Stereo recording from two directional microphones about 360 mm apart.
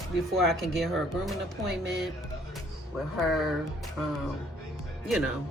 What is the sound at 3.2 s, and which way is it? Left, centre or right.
Speech, centre.